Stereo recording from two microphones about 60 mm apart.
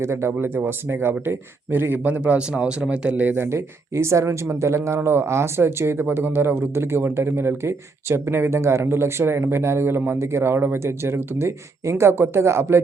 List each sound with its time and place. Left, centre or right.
0.0 s speech: right
3.3 s speech: right